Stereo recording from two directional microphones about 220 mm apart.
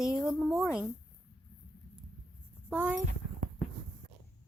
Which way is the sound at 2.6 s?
5° right (ahead or behind).